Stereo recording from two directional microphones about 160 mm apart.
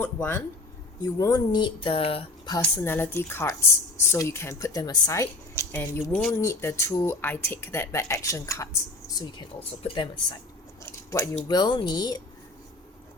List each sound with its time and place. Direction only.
0.0 s speech: 10° left (ahead or behind)
1.2 s speech: 25° left (ahead or behind)
2.6 s speech: 10° left (ahead or behind)
6.1 s speech: 5° left (ahead or behind)
6.4 s speech: 15° left (ahead or behind)
9.6 s speech: 35° left (ahead or behind)
10.8 s scissors: 20° left (ahead or behind)
11.4 s speech: 25° left (ahead or behind)